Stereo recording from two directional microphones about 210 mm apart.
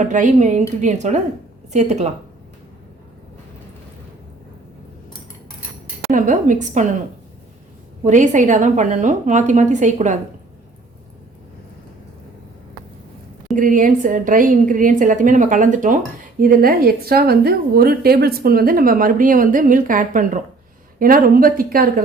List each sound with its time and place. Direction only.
0.0 s a woman's voice: 35° right (ahead or behind)
6.1 s a woman's voice: 40° right (ahead or behind)
8.0 s a woman's voice: 35° right (ahead or behind)
13.6 s a woman's voice: 40° right (ahead or behind)